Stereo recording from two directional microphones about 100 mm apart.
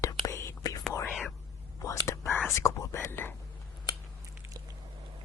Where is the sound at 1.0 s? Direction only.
5° right (ahead or behind).